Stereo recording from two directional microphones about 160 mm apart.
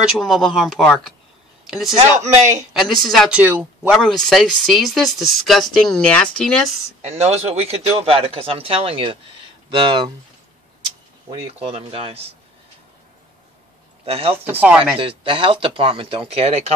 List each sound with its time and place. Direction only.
0.2 s speech: centre (ahead or behind)
2.1 s a man's voice: 50° right (ahead or behind)
2.8 s speech: centre (ahead or behind)
7.0 s speech: 40° right (ahead or behind)
11.2 s speech: 35° right (ahead or behind)
14.0 s speech: 35° right (ahead or behind)
14.3 s speech: 10° right (ahead or behind)
15.0 s speech: 35° right (ahead or behind)